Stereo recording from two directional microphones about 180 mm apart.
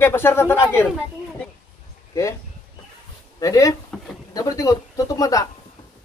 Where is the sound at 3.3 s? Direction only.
20° left (ahead or behind).